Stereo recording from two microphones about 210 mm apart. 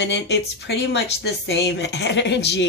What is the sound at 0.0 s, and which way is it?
Speech, 55° left (ahead or behind).